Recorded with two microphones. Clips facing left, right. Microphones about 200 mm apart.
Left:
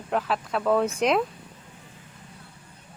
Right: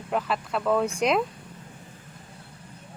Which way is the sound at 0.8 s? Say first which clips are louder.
Left 1 dB; 10° right (ahead or behind).